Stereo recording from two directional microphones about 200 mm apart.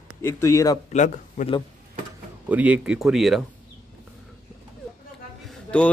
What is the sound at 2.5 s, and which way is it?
Speech, 5° right (ahead or behind).